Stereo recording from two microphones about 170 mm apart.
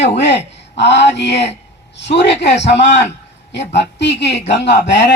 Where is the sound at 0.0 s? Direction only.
90° left.